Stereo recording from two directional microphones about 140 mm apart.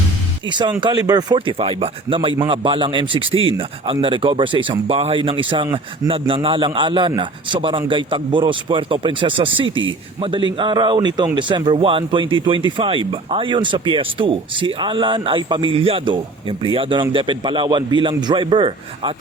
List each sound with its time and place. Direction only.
0.4 s speech: 35° right (ahead or behind)